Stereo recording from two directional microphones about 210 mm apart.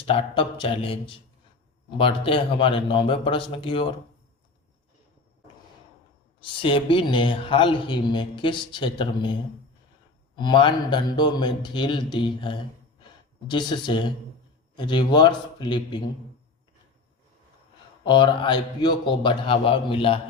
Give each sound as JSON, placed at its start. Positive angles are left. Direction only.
{"t": 0.0, "sound": "a man's voice", "side_deg": 25}
{"t": 6.4, "sound": "a man's voice", "side_deg": 25}
{"t": 10.3, "sound": "a man's voice", "side_deg": 20}
{"t": 18.0, "sound": "a man's voice", "side_deg": 20}